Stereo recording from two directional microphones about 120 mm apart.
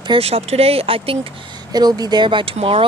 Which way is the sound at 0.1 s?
60° right (ahead or behind).